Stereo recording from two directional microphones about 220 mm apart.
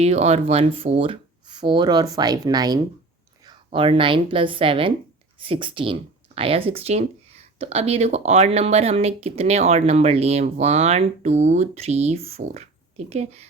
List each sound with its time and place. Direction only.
0.0 s a woman's voice: 30° right (ahead or behind)